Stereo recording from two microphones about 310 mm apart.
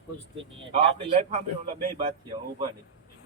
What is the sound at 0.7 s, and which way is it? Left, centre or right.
A man's voice, centre.